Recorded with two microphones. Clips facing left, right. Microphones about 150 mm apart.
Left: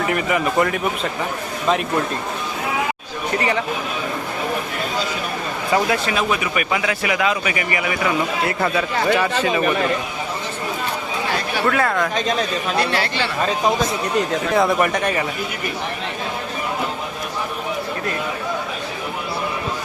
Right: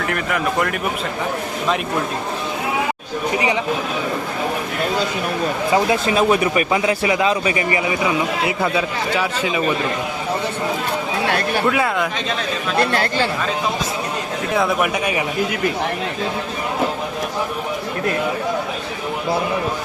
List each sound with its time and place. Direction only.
0.0 s speech: 5° left (ahead or behind)
3.3 s speech: 15° right (ahead or behind)
5.7 s a man's voice: 25° right (ahead or behind)
6.1 s a man's voice: 35° right (ahead or behind)
8.0 s a man's voice: 10° right (ahead or behind)
11.3 s a sound: 60° right (ahead or behind)
11.7 s a man's voice: 10° right (ahead or behind)
12.8 s speech: 50° right (ahead or behind)
14.5 s a man's voice: centre (ahead or behind)